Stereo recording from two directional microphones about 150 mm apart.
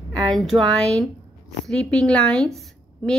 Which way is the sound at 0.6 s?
25° right (ahead or behind).